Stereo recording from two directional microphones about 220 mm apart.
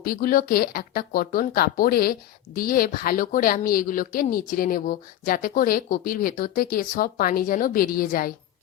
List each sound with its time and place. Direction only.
0.0 s a woman's voice: 40° left (ahead or behind)